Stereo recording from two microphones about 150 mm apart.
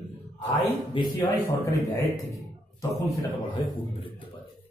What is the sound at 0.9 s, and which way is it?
Speech, 30° left (ahead or behind).